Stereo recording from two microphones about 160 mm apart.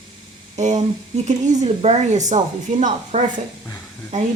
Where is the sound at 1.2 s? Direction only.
45° right (ahead or behind).